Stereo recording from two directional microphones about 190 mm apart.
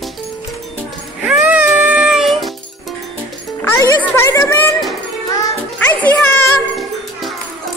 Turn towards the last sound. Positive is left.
turn(degrees=5)  # may be behind; listen again after turning